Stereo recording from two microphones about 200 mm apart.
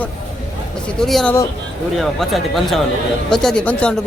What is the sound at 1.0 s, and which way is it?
A man's voice, centre (ahead or behind).